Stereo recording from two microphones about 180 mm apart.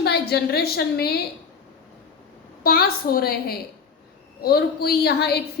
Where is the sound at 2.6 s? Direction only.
55° left (ahead or behind).